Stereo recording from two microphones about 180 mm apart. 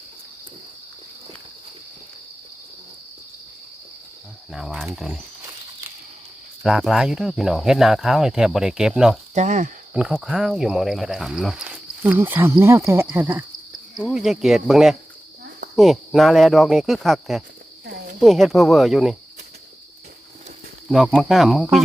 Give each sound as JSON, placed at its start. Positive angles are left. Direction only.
{"t": 4.5, "sound": "speech", "side_deg": 0}
{"t": 6.6, "sound": "speech", "side_deg": -5}
{"t": 9.3, "sound": "speech", "side_deg": -40}
{"t": 9.9, "sound": "speech", "side_deg": -5}
{"t": 13.9, "sound": "speech", "side_deg": 0}
{"t": 20.9, "sound": "speech", "side_deg": 0}